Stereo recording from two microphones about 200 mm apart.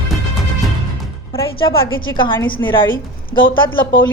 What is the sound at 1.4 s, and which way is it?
A woman's voice, 25° left (ahead or behind).